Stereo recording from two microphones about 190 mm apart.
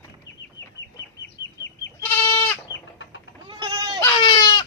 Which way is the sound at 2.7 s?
75° left (ahead or behind).